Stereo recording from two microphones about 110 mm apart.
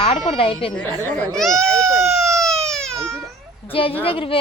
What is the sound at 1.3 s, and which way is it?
Baby cry, 5° left (ahead or behind).